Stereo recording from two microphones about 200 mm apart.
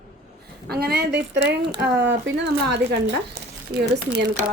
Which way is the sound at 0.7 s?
50° right (ahead or behind).